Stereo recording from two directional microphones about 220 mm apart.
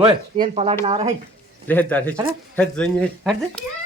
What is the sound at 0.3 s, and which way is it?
Speech, 30° right (ahead or behind).